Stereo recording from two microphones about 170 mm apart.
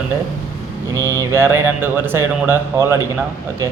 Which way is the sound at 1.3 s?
15° right (ahead or behind).